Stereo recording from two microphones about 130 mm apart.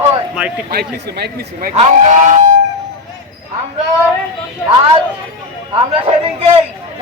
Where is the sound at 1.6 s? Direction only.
70° right (ahead or behind).